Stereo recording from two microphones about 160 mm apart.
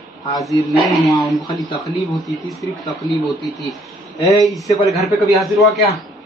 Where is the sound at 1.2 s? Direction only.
25° left (ahead or behind).